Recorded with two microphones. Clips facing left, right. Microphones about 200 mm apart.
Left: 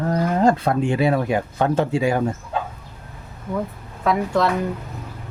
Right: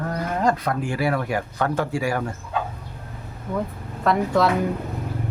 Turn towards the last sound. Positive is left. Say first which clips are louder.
# even
turn(degrees=0)  # may be behind; listen again after turning